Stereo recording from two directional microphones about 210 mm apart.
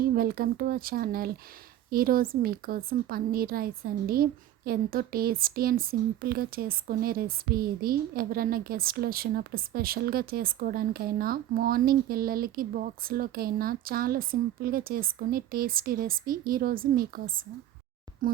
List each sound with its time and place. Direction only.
0.1 s a woman's voice: 45° right (ahead or behind)